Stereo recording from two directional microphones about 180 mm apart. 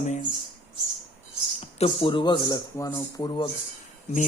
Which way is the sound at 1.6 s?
30° left (ahead or behind).